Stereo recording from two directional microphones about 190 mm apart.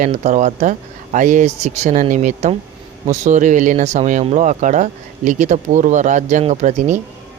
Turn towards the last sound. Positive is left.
turn(degrees=-40)  # may be behind; listen again after turning